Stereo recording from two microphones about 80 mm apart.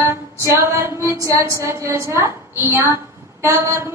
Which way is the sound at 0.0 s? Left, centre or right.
Right.